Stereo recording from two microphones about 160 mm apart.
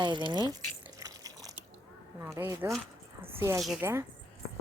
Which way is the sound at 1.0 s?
20° right (ahead or behind).